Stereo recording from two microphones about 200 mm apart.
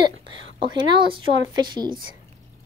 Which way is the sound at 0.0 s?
25° right (ahead or behind).